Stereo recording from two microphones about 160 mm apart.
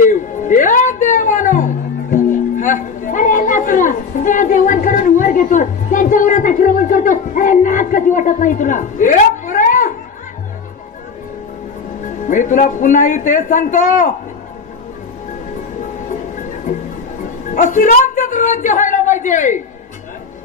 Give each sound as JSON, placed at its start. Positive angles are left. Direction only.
{"t": 0.0, "sound": "music", "side_deg": 55}
{"t": 12.3, "sound": "a man's voice", "side_deg": 55}
{"t": 17.5, "sound": "a woman's voice", "side_deg": 55}